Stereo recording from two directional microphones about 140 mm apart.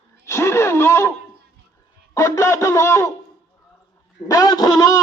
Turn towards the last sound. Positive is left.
turn(degrees=25)  # may be behind; listen again after turning